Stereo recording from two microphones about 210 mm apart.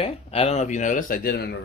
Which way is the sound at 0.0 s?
30° left (ahead or behind).